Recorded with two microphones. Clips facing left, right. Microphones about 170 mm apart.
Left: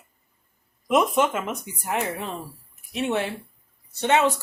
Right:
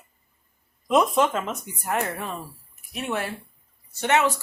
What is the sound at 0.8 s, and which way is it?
Speech, 5° left (ahead or behind).